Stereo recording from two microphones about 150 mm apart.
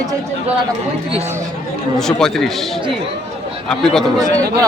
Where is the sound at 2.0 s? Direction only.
5° left (ahead or behind).